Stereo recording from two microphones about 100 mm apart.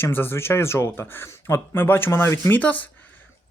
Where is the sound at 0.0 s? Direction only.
20° left (ahead or behind).